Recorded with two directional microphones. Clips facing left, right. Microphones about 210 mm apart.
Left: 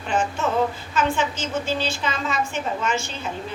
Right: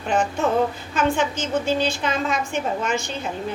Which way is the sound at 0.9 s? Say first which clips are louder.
Right 2 dB; 55° right (ahead or behind).